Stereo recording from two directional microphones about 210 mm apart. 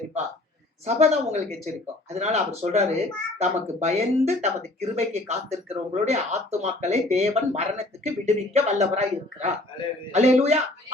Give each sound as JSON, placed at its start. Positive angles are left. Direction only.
{"t": 0.9, "sound": "speech", "side_deg": -30}